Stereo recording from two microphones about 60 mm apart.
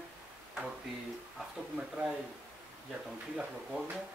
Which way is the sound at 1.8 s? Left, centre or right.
Centre.